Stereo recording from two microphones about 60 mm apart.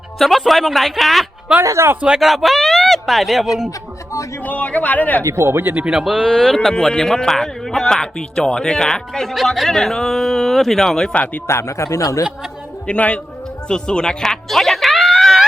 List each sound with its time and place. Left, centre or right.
0.2 s speech: centre
1.6 s speech: right
2.1 s speech: centre
4.4 s speech: left
5.2 s speech: right
5.6 s speech: right
5.9 s a man's voice: centre
11.4 s speech: left
12.9 s speech: left
13.7 s music: centre